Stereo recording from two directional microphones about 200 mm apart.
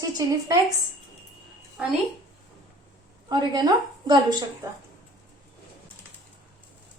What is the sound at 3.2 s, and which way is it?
A woman's voice, 20° right (ahead or behind).